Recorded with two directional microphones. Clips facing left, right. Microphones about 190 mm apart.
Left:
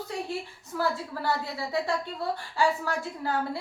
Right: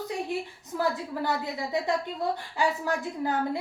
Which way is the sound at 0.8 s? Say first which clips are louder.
Right 1 dB; 20° right (ahead or behind).